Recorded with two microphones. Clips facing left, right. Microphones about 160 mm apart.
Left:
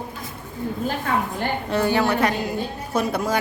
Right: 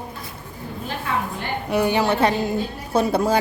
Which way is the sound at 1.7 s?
15° right (ahead or behind).